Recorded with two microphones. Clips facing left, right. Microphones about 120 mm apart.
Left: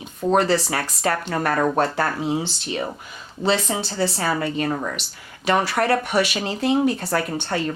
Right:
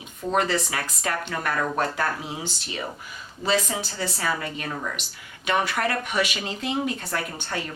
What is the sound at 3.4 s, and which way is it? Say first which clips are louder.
Speech: left 3 dB; 30° left (ahead or behind).